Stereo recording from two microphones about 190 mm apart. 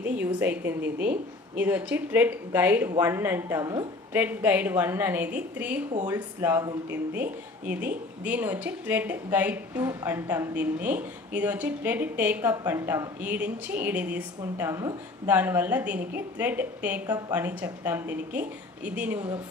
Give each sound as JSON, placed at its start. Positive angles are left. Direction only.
{"t": 0.0, "sound": "speech", "side_deg": -10}
{"t": 19.1, "sound": "a woman's voice", "side_deg": -20}